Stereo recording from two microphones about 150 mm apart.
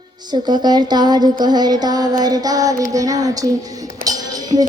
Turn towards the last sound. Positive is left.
turn(degrees=-25)  # may be behind; listen again after turning